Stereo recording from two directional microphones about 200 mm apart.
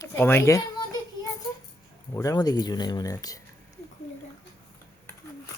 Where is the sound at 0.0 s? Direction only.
10° left (ahead or behind).